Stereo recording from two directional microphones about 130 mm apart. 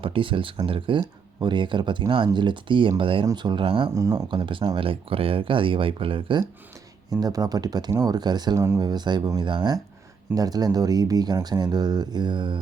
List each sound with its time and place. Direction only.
0.0 s speech: 40° right (ahead or behind)
3.9 s speech: 25° right (ahead or behind)
4.3 s speech: 40° right (ahead or behind)
7.1 s speech: 30° right (ahead or behind)